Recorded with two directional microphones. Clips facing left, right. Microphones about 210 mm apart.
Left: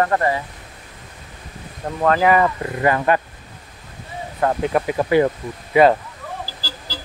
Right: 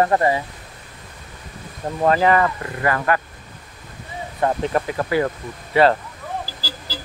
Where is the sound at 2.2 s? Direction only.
15° left (ahead or behind).